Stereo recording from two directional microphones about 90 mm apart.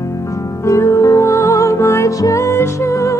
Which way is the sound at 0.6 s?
35° left (ahead or behind).